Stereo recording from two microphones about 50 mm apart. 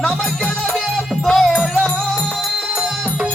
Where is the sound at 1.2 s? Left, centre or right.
Centre.